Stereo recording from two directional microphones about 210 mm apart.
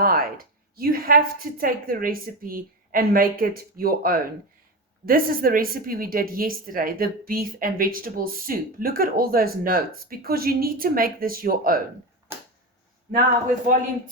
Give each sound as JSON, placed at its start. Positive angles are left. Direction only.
{"t": 0.0, "sound": "a woman's voice", "side_deg": -45}